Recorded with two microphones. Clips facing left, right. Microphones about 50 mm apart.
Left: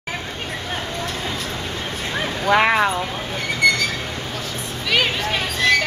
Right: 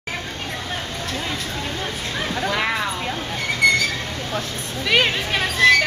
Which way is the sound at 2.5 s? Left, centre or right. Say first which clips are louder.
Left 10 dB; left.